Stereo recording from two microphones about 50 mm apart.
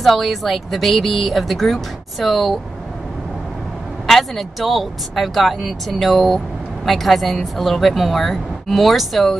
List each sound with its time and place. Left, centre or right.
0.0 s a woman's voice: centre
4.1 s a woman's voice: centre